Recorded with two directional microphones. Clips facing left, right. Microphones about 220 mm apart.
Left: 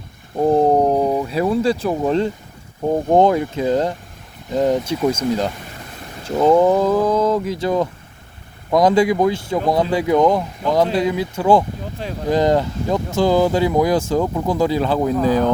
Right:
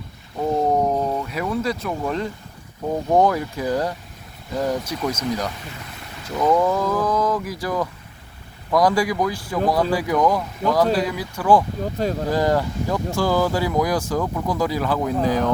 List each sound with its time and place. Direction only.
0.3 s a sound: 35° left (ahead or behind)
1.2 s speech: 30° left (ahead or behind)
12.0 s speech: 45° right (ahead or behind)
12.3 s speech: 20° left (ahead or behind)